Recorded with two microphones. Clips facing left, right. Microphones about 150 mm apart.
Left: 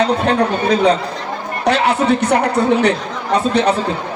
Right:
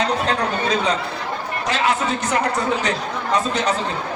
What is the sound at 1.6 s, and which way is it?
Speech, 65° left (ahead or behind).